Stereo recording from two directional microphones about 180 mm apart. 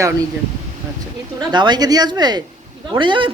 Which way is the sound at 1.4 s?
25° right (ahead or behind).